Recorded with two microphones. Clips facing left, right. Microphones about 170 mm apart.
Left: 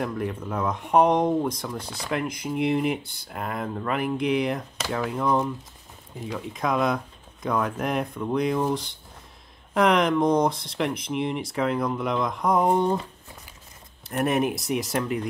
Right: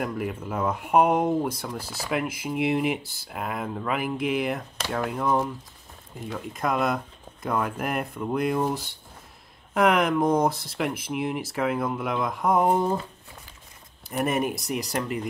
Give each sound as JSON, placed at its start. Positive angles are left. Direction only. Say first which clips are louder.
{"t": 0.0, "sound": "speech", "louder": "left 1 dB", "side_deg": -5}
{"t": 14.0, "sound": "speech", "louder": "left 2 dB", "side_deg": 0}